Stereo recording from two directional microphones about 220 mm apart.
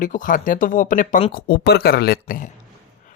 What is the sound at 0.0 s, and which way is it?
Speech, 35° left (ahead or behind).